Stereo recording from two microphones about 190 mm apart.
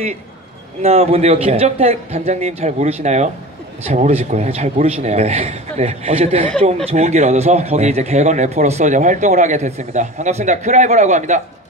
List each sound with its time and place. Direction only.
0.8 s speech: 30° right (ahead or behind)